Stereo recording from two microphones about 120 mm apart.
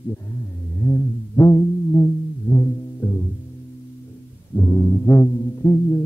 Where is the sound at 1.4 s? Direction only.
30° left (ahead or behind).